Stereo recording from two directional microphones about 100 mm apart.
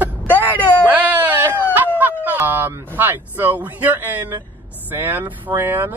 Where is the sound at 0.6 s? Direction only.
15° left (ahead or behind).